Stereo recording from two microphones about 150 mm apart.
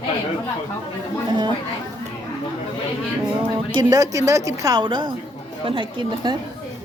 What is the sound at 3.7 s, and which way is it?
A woman's voice, 25° right (ahead or behind).